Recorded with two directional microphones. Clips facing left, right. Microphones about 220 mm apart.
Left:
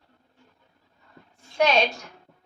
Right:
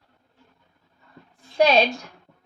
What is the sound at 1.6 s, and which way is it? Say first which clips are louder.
Speech: right 3 dB; 35° right (ahead or behind).